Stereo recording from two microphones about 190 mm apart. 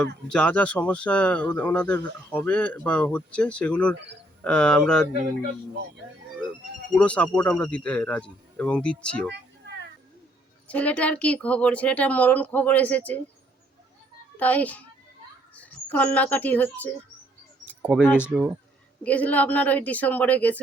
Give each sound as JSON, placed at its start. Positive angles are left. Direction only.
{"t": 0.0, "sound": "speech", "side_deg": 5}
{"t": 6.9, "sound": "speech", "side_deg": 5}
{"t": 9.3, "sound": "a sound", "side_deg": -65}
{"t": 10.7, "sound": "speech", "side_deg": 5}
{"t": 14.3, "sound": "speech", "side_deg": 10}
{"t": 17.7, "sound": "keys jangling", "side_deg": -5}
{"t": 18.0, "sound": "speech", "side_deg": 10}